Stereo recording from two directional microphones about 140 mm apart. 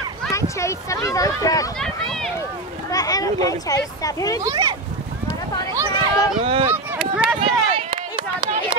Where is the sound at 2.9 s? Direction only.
25° left (ahead or behind).